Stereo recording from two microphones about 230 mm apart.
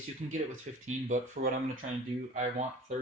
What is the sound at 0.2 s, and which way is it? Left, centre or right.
Speech, right.